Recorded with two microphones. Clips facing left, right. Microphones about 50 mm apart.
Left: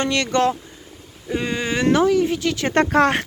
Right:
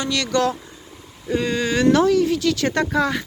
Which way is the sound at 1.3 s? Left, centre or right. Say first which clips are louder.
Right 2 dB; centre.